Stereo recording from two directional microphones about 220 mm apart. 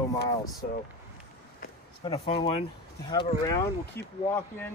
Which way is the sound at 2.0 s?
25° left (ahead or behind).